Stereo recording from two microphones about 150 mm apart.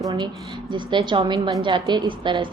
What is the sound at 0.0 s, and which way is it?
A woman's voice, 30° right (ahead or behind).